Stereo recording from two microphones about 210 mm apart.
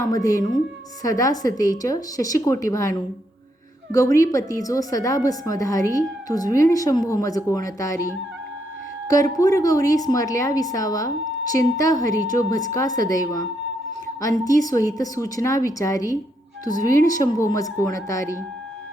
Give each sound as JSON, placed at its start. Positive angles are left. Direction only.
{"t": 0.0, "sound": "a woman's voice", "side_deg": 15}